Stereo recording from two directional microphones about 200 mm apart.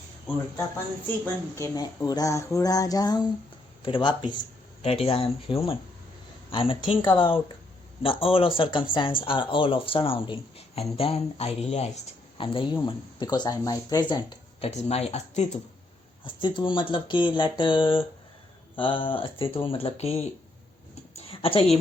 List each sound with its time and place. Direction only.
1.5 s speech: 15° left (ahead or behind)
21.2 s a woman's voice: 30° left (ahead or behind)